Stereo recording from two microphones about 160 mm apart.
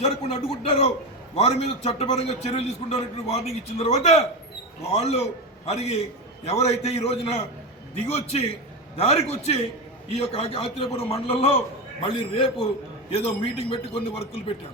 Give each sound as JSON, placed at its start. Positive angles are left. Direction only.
{"t": 0.0, "sound": "a man's voice", "side_deg": 40}